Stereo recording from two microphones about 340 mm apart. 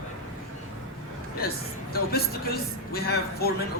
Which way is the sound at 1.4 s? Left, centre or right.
Left.